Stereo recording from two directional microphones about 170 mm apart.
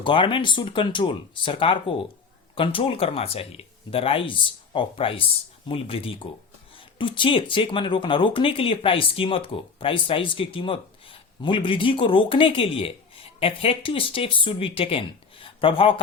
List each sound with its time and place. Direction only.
0.0 s speech: 30° left (ahead or behind)